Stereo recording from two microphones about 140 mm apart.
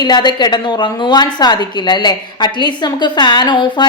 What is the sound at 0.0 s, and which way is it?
A woman's voice, 30° left (ahead or behind).